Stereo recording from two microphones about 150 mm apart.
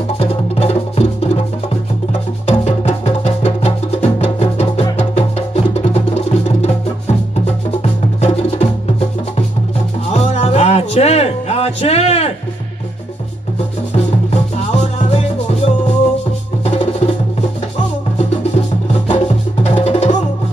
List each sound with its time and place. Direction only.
0.2 s music: 40° left (ahead or behind)
2.4 s music: 45° left (ahead or behind)
8.2 s music: 45° left (ahead or behind)
10.1 s music: 40° left (ahead or behind)
14.3 s music: 45° left (ahead or behind)
18.1 s music: 45° left (ahead or behind)